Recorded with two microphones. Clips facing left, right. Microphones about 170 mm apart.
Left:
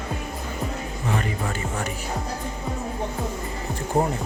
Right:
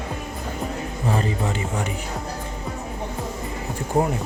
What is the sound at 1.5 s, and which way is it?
Music, 20° right (ahead or behind).